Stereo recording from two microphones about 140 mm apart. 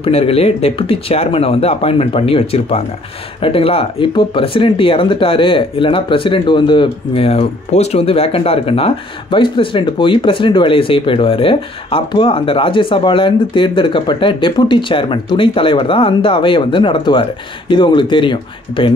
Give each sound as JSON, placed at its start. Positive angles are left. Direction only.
{"t": 0.0, "sound": "speech", "side_deg": 45}